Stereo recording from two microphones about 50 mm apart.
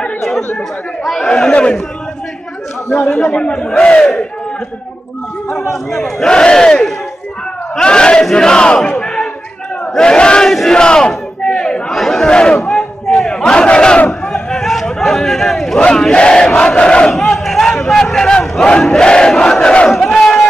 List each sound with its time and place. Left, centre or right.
1.0 s chatter: centre
1.3 s a man's voice: centre
3.0 s a man's voice: left
5.7 s a man's voice: centre
9.0 s slam: centre
9.9 s speech: centre
10.7 s battle cry: centre
11.9 s battle cry: centre
12.3 s battle cry: centre
14.2 s a sound: centre
16.0 s crowd: centre
17.1 s crowd: centre
19.9 s battle cry: centre